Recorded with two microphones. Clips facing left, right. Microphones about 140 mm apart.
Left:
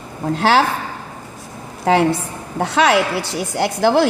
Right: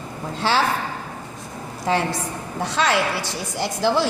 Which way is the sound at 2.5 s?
65° left (ahead or behind).